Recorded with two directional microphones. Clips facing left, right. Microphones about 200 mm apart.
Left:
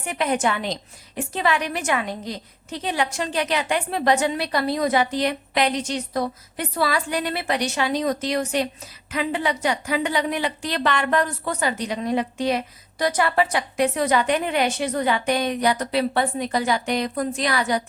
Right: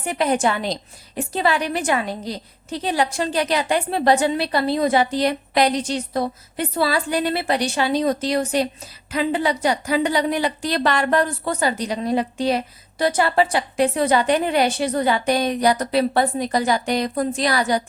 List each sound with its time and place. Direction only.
0.0 s a woman's voice: 35° right (ahead or behind)